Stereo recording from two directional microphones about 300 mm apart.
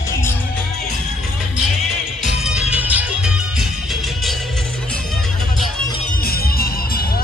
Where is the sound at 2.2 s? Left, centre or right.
Centre.